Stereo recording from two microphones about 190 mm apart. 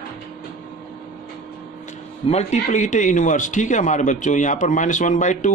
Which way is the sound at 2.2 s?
35° left (ahead or behind).